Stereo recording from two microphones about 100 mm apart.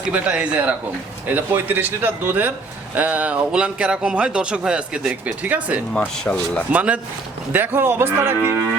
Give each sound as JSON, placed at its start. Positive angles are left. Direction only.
{"t": 0.1, "sound": "speech", "side_deg": -10}
{"t": 5.9, "sound": "speech", "side_deg": 15}
{"t": 6.7, "sound": "speech", "side_deg": -15}